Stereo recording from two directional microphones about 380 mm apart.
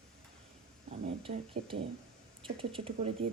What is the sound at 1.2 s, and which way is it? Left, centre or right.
Speech, centre.